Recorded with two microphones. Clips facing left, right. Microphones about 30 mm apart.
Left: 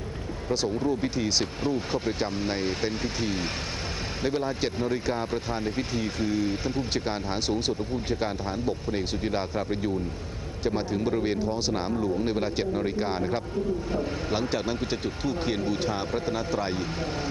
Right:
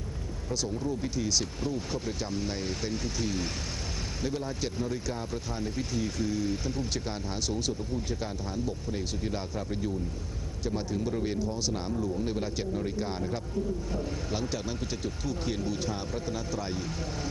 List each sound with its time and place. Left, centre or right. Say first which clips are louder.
0.4 s speech: left 6 dB; left